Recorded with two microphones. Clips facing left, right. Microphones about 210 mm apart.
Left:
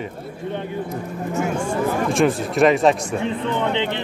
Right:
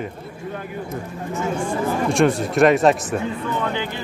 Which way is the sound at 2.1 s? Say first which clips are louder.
Right 1 dB; centre (ahead or behind).